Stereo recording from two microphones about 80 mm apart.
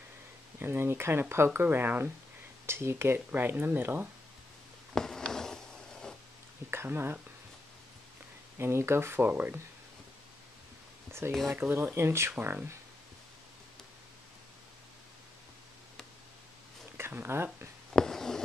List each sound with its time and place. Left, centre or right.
0.6 s speech: right
4.9 s a sound: centre
6.7 s speech: right
8.5 s speech: right
11.1 s speech: right
16.9 s speech: right
17.9 s a sound: centre